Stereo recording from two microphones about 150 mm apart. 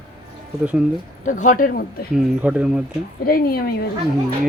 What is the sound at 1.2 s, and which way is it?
Speech, 60° left (ahead or behind).